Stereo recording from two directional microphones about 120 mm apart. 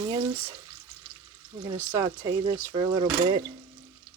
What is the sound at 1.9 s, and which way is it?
Speech, 25° right (ahead or behind).